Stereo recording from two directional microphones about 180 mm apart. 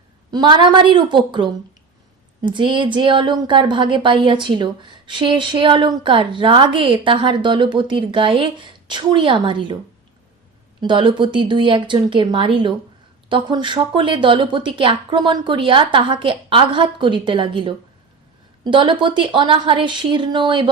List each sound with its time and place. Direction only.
0.3 s a woman's voice: 25° right (ahead or behind)
10.8 s a woman's voice: 25° right (ahead or behind)